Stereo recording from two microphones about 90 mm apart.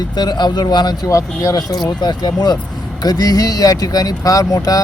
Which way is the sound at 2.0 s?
50° left (ahead or behind).